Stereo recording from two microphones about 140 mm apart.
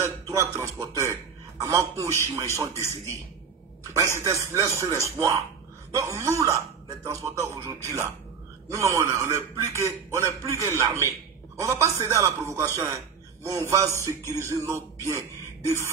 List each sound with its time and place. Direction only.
0.0 s a sound: 20° right (ahead or behind)
1.6 s a man's voice: 20° right (ahead or behind)
14.0 s speech: 20° left (ahead or behind)
14.4 s speech: 20° right (ahead or behind)